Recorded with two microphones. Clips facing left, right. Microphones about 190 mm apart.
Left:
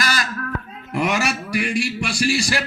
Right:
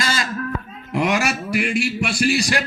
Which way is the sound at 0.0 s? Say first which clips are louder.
Even; 25° right (ahead or behind).